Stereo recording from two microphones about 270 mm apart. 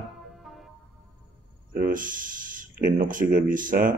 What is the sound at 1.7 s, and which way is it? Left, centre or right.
Speech, right.